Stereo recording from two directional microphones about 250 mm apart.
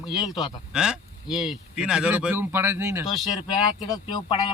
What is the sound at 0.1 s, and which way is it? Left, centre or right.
Speech, centre.